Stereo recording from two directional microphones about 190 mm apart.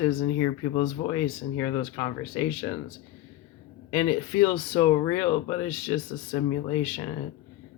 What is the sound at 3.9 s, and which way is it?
Speech, 20° left (ahead or behind).